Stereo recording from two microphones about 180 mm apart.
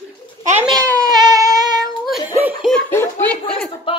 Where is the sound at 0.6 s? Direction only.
25° right (ahead or behind).